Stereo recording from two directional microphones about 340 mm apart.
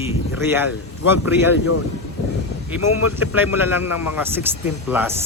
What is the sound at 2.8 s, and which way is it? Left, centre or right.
Speech, left.